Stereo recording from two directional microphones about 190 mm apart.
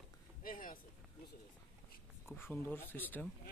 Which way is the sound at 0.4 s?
45° left (ahead or behind).